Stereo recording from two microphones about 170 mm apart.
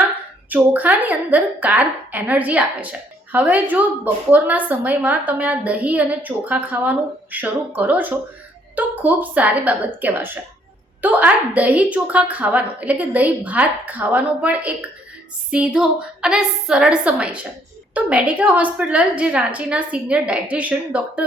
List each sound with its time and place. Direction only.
0.5 s a woman's voice: 10° right (ahead or behind)